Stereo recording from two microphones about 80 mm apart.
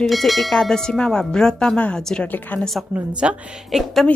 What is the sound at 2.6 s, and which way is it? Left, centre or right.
Speech, centre.